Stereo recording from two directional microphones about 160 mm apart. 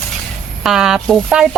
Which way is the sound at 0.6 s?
5° right (ahead or behind).